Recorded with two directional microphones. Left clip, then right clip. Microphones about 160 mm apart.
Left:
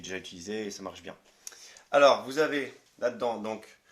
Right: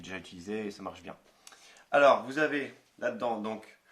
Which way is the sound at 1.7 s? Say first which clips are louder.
Left 1 dB; 30° left (ahead or behind).